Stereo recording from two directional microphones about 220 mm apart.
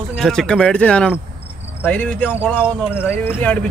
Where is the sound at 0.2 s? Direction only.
Centre (ahead or behind).